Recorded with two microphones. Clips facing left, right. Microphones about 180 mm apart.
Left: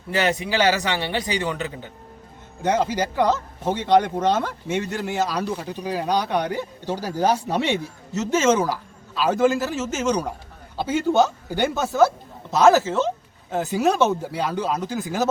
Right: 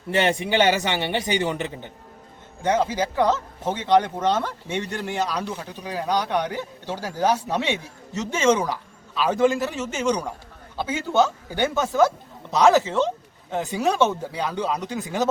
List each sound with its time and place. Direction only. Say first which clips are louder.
0.1 s a man's voice: right 1 dB; 25° right (ahead or behind)
2.6 s speech: even; 10° left (ahead or behind)